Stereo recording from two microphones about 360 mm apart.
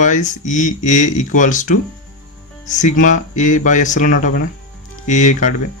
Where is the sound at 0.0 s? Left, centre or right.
Left.